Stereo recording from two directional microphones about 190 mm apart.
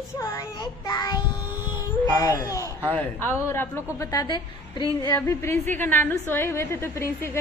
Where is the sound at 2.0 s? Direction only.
15° left (ahead or behind).